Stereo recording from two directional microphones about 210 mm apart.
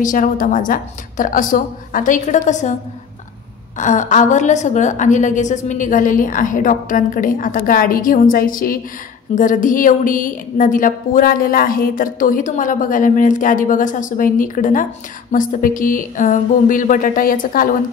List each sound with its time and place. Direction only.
0.0 s a woman's voice: 40° left (ahead or behind)
3.7 s a woman's voice: 35° left (ahead or behind)